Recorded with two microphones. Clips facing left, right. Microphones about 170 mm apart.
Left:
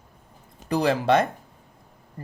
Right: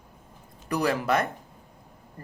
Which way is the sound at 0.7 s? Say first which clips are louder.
Left 4 dB; 30° left (ahead or behind).